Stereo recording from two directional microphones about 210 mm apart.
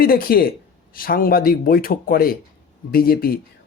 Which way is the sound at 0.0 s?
45° left (ahead or behind).